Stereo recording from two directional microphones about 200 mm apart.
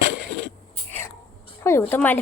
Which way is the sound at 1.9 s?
10° left (ahead or behind).